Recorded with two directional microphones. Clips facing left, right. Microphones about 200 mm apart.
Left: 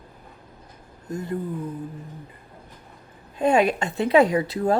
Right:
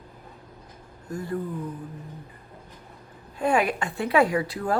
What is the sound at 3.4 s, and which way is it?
Speech, 25° left (ahead or behind).